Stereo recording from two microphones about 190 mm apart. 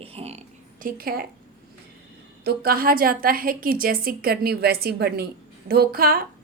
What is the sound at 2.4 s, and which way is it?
A woman's voice, 55° right (ahead or behind).